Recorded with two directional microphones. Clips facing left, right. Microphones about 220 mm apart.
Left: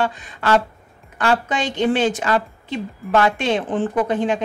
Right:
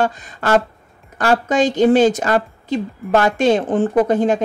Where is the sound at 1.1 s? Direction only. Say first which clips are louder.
Right 4 dB; 40° right (ahead or behind).